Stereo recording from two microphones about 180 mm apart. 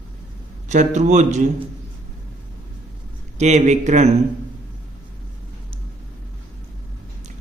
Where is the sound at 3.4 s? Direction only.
40° right (ahead or behind).